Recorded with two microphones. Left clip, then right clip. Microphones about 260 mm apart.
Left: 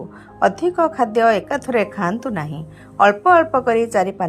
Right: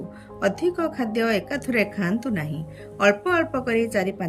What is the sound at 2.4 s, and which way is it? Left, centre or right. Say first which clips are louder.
Speech: left 4 dB; centre.